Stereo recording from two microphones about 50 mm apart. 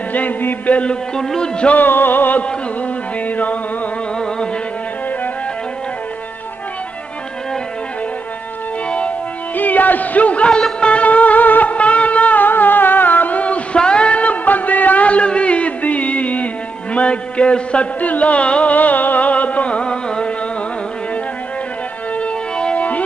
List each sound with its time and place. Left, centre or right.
0.1 s music: left
1.1 s music: centre
1.7 s music: left
9.6 s a sound: left
10.8 s music: left
22.2 s music: left